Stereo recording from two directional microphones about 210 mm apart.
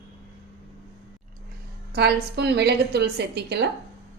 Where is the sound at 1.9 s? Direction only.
55° right (ahead or behind).